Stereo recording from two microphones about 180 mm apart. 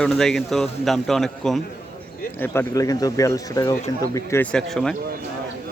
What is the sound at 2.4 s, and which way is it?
Speech, 15° left (ahead or behind).